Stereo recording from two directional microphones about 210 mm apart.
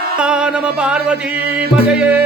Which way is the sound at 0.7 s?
5° right (ahead or behind).